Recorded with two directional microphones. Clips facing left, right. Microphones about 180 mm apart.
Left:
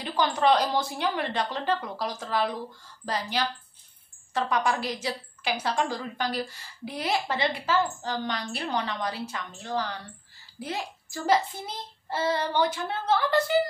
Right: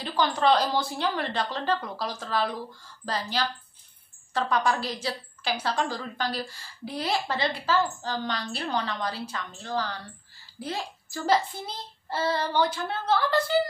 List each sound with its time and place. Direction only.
0.0 s a sound: 15° left (ahead or behind)
0.4 s a woman's voice: 15° left (ahead or behind)
11.2 s a woman's voice: 15° left (ahead or behind)